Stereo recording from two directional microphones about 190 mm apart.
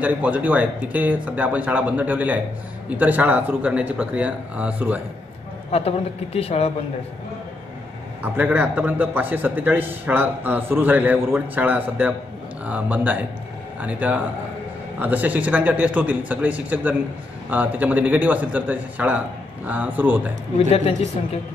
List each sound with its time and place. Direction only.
0.0 s a man's voice: 10° right (ahead or behind)
5.7 s a man's voice: 30° left (ahead or behind)
8.2 s a man's voice: 10° right (ahead or behind)
20.5 s a man's voice: 30° left (ahead or behind)